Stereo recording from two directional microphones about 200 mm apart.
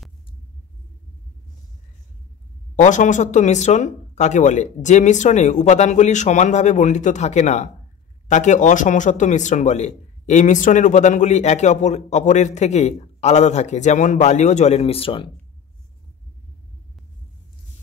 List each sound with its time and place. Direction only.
2.7 s a man's voice: 40° left (ahead or behind)